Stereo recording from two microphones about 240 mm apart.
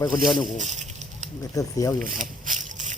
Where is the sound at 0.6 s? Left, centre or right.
Right.